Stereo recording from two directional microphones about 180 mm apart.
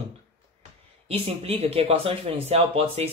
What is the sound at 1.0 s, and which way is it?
Speech, 35° right (ahead or behind).